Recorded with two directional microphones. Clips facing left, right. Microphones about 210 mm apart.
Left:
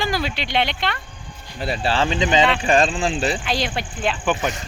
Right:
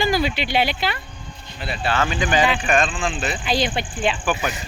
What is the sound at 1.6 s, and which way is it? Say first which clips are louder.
Speech: left 2 dB; 35° left (ahead or behind).